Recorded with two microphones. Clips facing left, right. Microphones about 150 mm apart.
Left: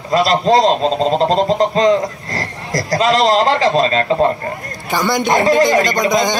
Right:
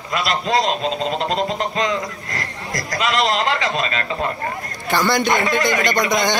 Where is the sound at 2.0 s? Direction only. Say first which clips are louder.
Left 6 dB; 45° left (ahead or behind).